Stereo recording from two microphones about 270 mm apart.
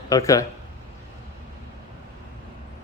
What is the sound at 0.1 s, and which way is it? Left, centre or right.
Speech, centre.